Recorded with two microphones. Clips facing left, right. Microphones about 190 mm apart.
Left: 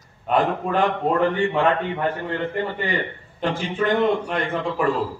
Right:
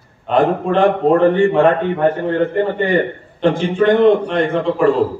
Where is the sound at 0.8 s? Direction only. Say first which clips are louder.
Right 8 dB; 50° right (ahead or behind).